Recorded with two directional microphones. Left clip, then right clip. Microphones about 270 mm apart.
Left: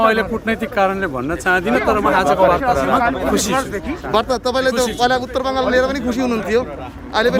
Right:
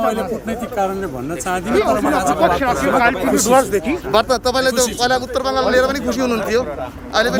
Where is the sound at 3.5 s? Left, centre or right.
Right.